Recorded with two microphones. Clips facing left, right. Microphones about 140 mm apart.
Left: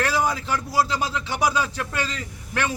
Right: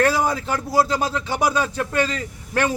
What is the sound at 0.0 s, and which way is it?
Speech, 40° right (ahead or behind).